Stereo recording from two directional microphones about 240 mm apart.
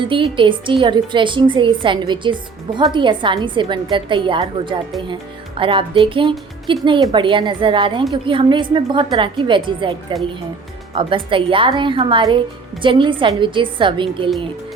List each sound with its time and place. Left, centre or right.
0.0 s a woman's voice: right